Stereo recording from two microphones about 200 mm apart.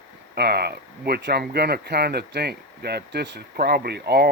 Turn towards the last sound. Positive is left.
turn(degrees=-55)  # may be behind; listen again after turning